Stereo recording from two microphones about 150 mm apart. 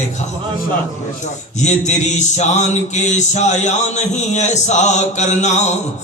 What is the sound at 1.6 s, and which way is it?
Mantra, 50° left (ahead or behind).